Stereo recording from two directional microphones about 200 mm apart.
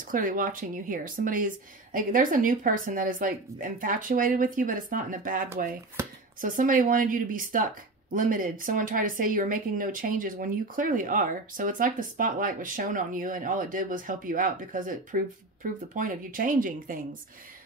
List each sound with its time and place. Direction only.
0.1 s speech: 45° right (ahead or behind)